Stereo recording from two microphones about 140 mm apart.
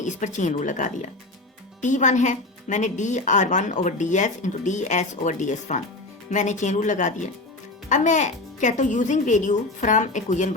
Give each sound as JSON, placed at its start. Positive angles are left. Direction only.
{"t": 0.0, "sound": "speech", "side_deg": 60}